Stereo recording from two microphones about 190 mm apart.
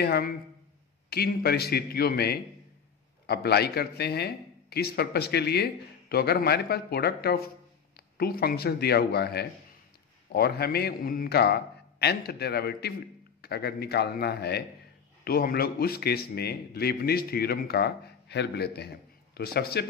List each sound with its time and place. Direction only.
0.0 s a man's voice: 55° left (ahead or behind)